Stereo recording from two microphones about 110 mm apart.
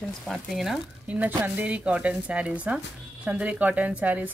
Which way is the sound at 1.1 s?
15° right (ahead or behind).